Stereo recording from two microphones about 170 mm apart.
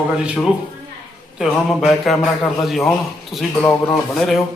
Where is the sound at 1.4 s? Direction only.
Centre (ahead or behind).